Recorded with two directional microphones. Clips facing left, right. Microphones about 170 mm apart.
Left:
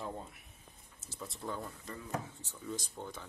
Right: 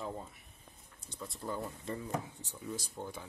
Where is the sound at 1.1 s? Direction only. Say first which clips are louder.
Right 1 dB; centre (ahead or behind).